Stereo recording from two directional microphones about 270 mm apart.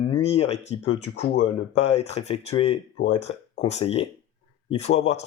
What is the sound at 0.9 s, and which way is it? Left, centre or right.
Speech, left.